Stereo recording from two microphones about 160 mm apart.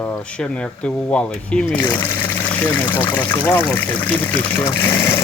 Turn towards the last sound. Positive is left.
turn(degrees=20)  # may be behind; listen again after turning